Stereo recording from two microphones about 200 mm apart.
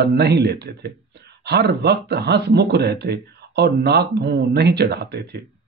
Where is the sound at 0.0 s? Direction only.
55° right (ahead or behind).